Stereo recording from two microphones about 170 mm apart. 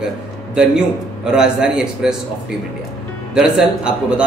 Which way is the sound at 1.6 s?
5° right (ahead or behind).